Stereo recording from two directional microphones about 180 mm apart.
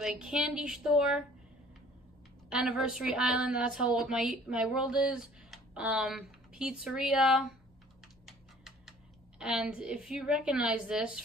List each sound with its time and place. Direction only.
0.0 s a woman's voice: 5° right (ahead or behind)
2.5 s a woman's voice: 5° right (ahead or behind)
8.3 s typing: centre (ahead or behind)
9.4 s a woman's voice: 5° right (ahead or behind)